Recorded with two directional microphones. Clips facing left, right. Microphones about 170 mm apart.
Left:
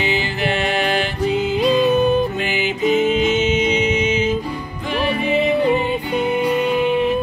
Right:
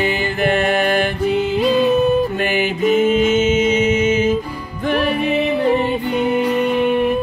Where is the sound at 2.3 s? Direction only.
55° right (ahead or behind).